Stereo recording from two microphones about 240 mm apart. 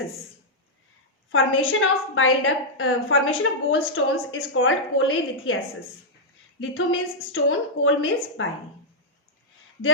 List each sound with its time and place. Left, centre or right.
1.3 s a woman's voice: left
6.6 s a woman's voice: left